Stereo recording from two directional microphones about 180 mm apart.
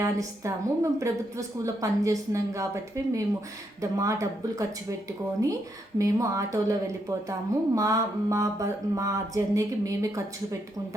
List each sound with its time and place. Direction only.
0.0 s a woman's voice: 20° right (ahead or behind)
6.0 s a woman's voice: 20° right (ahead or behind)